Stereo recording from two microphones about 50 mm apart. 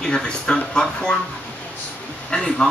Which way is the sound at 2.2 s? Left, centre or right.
Centre.